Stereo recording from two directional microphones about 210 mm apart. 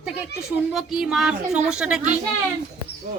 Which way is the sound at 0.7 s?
Centre (ahead or behind).